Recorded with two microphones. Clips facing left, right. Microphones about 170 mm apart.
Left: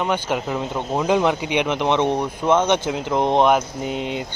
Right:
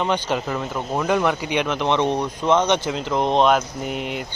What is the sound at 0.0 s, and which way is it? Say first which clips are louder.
Speech: even; 10° left (ahead or behind).